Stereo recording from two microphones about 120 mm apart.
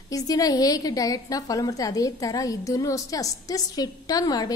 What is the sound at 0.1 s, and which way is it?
A woman's voice, 30° left (ahead or behind).